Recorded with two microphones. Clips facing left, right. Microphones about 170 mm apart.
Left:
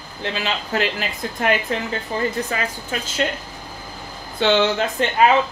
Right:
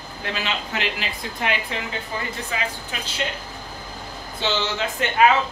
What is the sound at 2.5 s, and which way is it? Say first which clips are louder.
Speech: left 3 dB; 45° left (ahead or behind).